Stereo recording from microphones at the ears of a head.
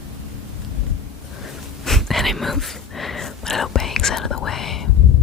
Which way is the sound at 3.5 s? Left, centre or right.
Left.